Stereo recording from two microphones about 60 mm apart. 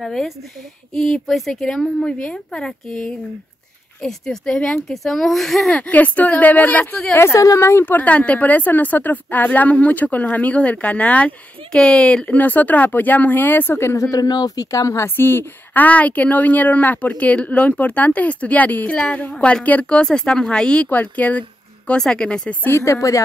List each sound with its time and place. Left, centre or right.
0.0 s a woman's voice: centre
1.2 s a woman's voice: centre
5.7 s speech: left
7.3 s speech: left
7.8 s speech: left
12.4 s speech: left
13.9 s speech: left
15.0 s a woman's voice: left; by 20.9 s centre
20.9 s a woman's voice: left
22.7 s speech: left